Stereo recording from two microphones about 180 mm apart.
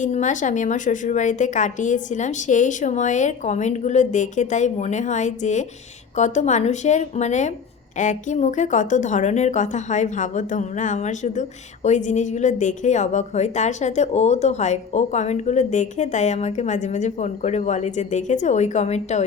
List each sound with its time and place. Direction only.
0.0 s a woman's voice: 45° left (ahead or behind)